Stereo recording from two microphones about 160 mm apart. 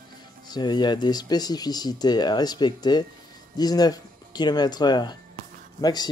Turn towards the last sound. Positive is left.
turn(degrees=25)  # may be behind; listen again after turning